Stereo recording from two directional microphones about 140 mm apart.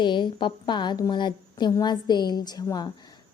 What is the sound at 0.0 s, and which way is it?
A woman's voice, 35° left (ahead or behind).